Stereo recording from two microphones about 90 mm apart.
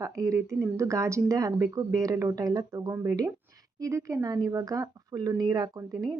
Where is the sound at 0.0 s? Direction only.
35° right (ahead or behind).